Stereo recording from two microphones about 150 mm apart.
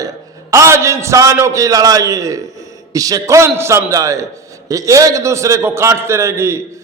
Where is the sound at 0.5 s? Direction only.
20° right (ahead or behind).